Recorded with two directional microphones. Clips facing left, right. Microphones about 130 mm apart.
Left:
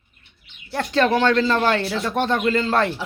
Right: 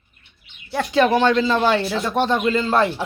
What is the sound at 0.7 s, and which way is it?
Speech, 10° right (ahead or behind).